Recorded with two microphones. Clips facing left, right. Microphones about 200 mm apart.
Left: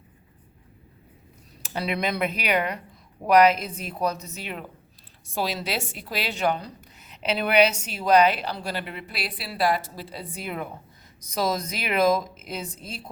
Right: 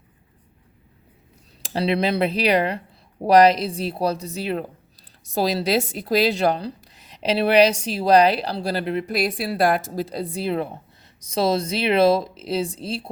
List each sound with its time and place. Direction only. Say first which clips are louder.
1.6 s a woman's voice: right 6 dB; 30° right (ahead or behind)